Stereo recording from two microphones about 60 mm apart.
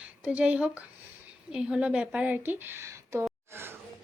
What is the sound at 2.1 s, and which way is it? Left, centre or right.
Speech, right.